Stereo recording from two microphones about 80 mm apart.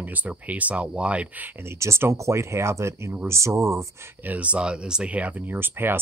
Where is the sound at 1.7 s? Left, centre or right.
Right.